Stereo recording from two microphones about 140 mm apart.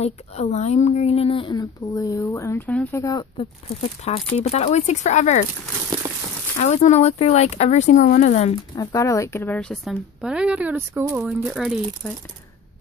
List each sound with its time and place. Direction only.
0.0 s speech: 50° left (ahead or behind)
1.6 s speech: 25° left (ahead or behind)
2.7 s speech: 10° left (ahead or behind)
3.0 s speech: 25° left (ahead or behind)
3.3 s speech: 45° left (ahead or behind)
6.6 s speech: 55° left (ahead or behind)
8.7 s speech: 25° left (ahead or behind)
9.6 s speech: 5° left (ahead or behind)
10.2 s speech: 5° right (ahead or behind)